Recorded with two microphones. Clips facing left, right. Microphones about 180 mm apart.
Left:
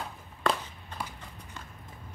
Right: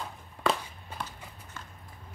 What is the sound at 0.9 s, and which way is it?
Clip-clop, 10° right (ahead or behind).